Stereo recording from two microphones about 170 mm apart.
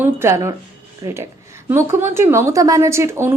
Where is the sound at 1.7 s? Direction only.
15° right (ahead or behind).